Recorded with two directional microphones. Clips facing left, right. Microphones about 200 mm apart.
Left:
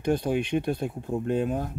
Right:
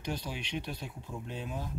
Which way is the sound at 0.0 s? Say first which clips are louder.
Left 13 dB; 55° left (ahead or behind).